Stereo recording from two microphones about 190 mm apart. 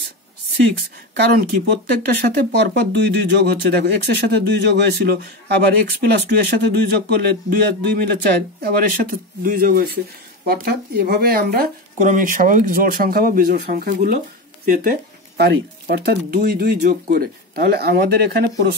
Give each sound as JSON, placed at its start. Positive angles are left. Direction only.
{"t": 1.1, "sound": "speech", "side_deg": -60}
{"t": 2.5, "sound": "speech", "side_deg": -65}